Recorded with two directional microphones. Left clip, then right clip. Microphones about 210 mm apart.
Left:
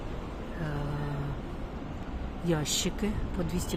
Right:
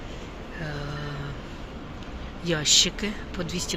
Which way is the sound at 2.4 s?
15° left (ahead or behind).